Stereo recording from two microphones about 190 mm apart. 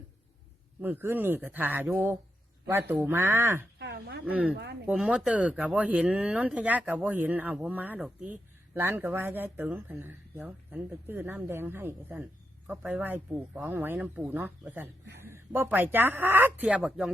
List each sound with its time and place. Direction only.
0.8 s speech: 10° right (ahead or behind)
3.8 s speech: 60° right (ahead or behind)
4.3 s speech: 5° right (ahead or behind)